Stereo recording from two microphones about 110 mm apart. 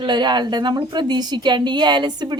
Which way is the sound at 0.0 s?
45° right (ahead or behind).